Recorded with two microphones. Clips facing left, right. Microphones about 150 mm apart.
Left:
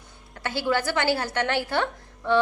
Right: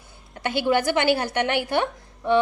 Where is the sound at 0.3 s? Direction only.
20° right (ahead or behind).